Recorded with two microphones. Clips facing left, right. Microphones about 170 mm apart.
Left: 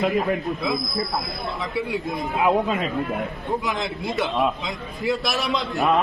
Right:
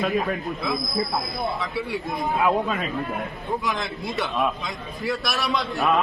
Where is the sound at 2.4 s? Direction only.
20° left (ahead or behind).